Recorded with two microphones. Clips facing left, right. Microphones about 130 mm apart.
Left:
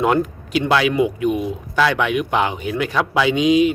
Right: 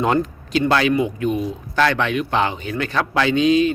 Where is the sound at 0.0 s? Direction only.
10° left (ahead or behind).